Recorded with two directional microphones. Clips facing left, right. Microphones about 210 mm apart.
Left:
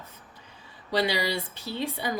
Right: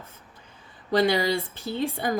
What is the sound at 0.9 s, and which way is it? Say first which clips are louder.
A woman's voice: right 5 dB; 50° right (ahead or behind).